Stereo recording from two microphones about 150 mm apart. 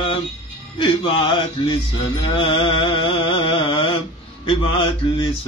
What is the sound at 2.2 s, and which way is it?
Mantra, 35° left (ahead or behind).